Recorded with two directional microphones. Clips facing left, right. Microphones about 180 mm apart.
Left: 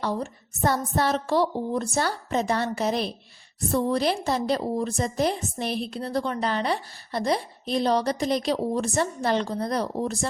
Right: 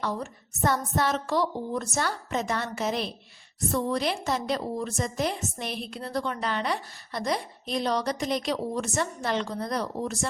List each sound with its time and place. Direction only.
0.0 s a woman's voice: 35° left (ahead or behind)